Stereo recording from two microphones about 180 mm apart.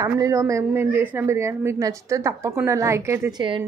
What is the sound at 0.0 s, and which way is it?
A woman's voice, 20° right (ahead or behind).